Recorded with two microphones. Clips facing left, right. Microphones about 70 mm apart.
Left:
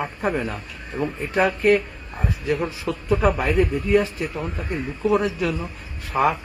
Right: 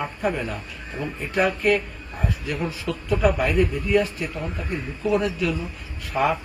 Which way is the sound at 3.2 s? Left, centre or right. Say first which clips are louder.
Right 1 dB; left.